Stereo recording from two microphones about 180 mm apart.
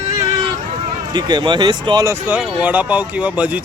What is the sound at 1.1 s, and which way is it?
Speech, 25° right (ahead or behind).